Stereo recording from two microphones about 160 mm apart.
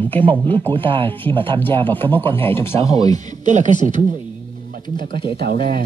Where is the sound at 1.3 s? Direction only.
30° right (ahead or behind).